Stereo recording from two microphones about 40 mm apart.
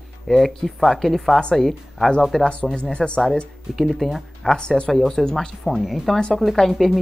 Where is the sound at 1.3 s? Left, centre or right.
Centre.